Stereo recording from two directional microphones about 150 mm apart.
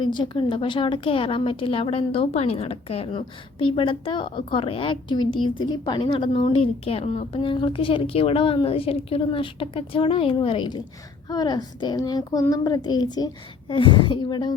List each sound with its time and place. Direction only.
0.0 s a woman's voice: 30° left (ahead or behind)